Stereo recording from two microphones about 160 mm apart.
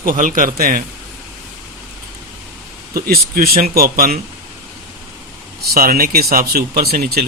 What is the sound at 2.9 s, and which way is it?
Speech, 65° right (ahead or behind).